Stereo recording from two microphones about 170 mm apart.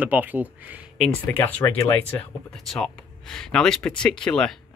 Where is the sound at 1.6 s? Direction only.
20° left (ahead or behind).